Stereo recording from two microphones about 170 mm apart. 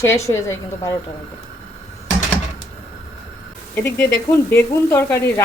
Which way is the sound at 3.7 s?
10° left (ahead or behind).